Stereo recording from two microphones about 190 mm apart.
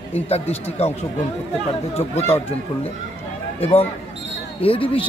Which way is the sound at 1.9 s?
35° left (ahead or behind).